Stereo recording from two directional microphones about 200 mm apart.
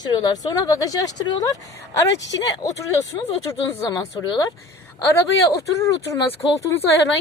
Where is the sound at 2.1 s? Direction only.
65° left (ahead or behind).